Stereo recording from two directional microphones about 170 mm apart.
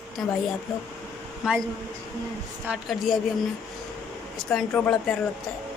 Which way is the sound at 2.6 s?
5° right (ahead or behind).